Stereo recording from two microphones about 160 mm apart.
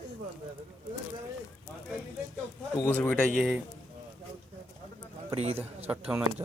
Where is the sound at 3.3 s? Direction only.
Centre (ahead or behind).